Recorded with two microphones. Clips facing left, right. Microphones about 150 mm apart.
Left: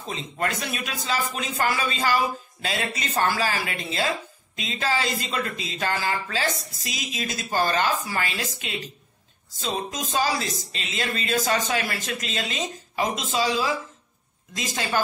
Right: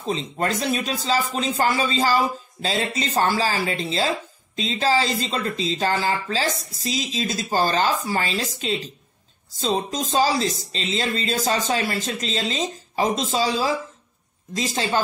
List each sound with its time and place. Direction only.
0.0 s speech: 30° right (ahead or behind)